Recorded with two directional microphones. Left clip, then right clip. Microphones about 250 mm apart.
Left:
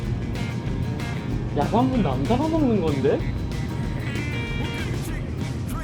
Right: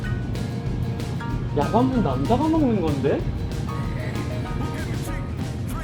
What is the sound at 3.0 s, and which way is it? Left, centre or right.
Speech, centre.